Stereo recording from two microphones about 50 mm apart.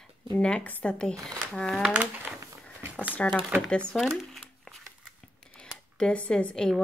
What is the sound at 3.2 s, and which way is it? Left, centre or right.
Speech, left.